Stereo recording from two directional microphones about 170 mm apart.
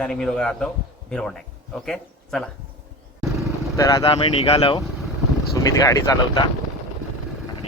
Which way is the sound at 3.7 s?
25° left (ahead or behind).